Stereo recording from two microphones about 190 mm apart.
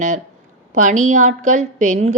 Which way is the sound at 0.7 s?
40° right (ahead or behind).